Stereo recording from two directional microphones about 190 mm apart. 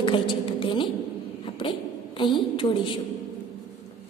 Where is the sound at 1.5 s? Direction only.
25° left (ahead or behind).